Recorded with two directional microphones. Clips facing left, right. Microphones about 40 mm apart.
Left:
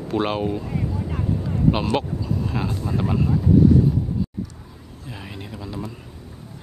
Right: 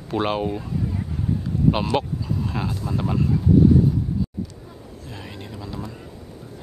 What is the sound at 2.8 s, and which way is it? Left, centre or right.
Speech, centre.